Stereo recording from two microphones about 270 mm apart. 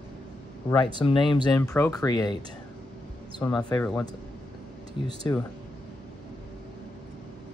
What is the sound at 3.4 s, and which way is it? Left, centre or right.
Speech, centre.